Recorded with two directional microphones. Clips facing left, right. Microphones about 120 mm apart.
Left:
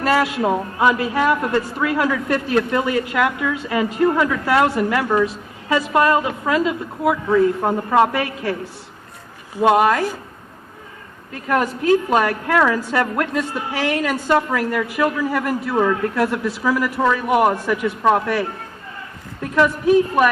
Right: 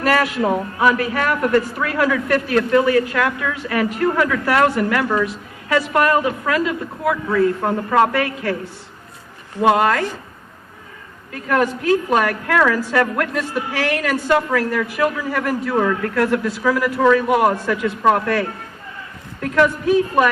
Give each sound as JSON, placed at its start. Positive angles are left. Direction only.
{"t": 0.0, "sound": "a woman's voice", "side_deg": 20}
{"t": 9.6, "sound": "a woman's voice", "side_deg": 20}
{"t": 11.4, "sound": "a woman's voice", "side_deg": 25}